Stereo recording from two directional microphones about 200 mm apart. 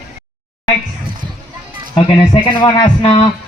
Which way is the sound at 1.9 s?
20° left (ahead or behind).